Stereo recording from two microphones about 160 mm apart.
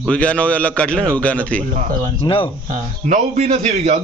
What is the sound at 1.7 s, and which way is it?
Speech, 50° right (ahead or behind).